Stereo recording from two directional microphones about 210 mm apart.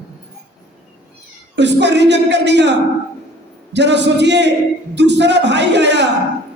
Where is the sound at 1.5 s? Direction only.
55° right (ahead or behind).